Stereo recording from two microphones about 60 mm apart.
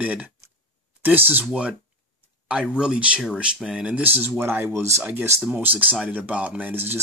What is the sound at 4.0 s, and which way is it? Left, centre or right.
Speech, right.